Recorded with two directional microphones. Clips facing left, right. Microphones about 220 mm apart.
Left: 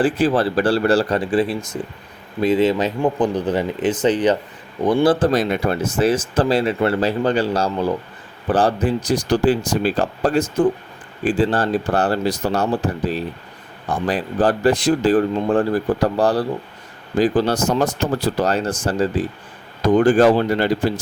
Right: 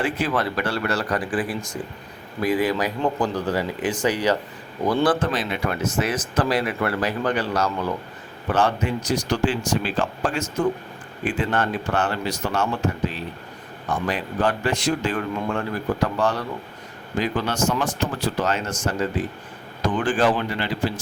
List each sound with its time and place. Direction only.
0.0 s speech: 30° left (ahead or behind)
5.2 s speech: 40° left (ahead or behind)